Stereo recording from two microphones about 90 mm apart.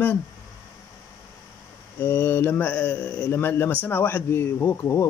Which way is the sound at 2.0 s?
25° left (ahead or behind).